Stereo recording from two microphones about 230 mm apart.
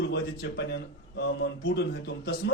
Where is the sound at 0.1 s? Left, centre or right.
Left.